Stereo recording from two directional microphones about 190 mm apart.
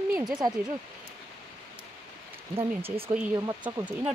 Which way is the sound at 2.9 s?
5° right (ahead or behind).